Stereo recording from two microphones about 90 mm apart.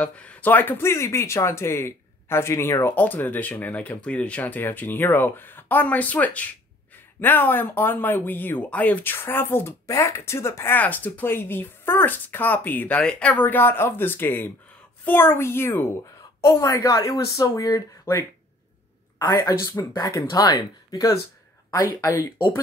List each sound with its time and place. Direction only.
0.0 s speech: 15° left (ahead or behind)
16.5 s speech: 40° left (ahead or behind)
19.3 s speech: 35° left (ahead or behind)
22.0 s speech: 25° left (ahead or behind)